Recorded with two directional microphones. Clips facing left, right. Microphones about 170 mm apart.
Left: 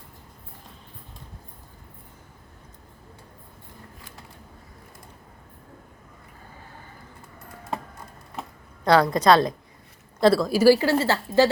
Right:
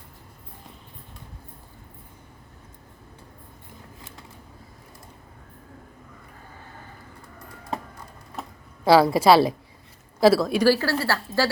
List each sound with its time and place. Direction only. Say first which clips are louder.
8.8 s a woman's voice: right 2 dB; 5° right (ahead or behind)
10.7 s a woman's voice: left 6 dB; 20° left (ahead or behind)